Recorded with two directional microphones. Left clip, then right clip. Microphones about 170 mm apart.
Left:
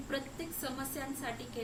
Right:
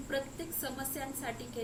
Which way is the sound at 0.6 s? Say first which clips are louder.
Right 1 dB; 5° right (ahead or behind).